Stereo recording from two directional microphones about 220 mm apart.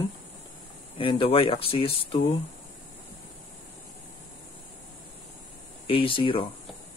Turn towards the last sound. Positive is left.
turn(degrees=25)  # may be behind; listen again after turning